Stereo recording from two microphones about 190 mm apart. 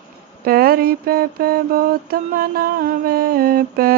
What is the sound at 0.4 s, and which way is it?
Mantra, 50° right (ahead or behind).